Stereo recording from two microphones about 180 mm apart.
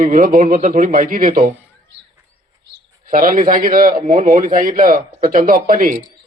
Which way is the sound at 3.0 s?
50° right (ahead or behind).